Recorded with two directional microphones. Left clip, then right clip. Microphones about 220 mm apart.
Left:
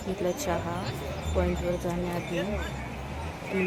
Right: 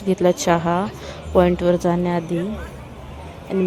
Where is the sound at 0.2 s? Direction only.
40° right (ahead or behind).